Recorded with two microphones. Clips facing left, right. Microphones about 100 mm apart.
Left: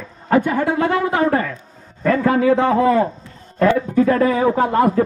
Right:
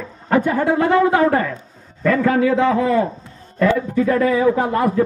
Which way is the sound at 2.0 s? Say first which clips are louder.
Left 1 dB; 35° left (ahead or behind).